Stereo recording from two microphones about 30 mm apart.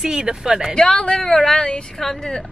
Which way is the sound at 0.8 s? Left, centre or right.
Left.